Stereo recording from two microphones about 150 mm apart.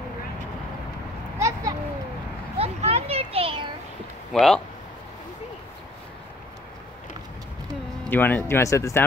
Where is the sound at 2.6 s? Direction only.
45° right (ahead or behind).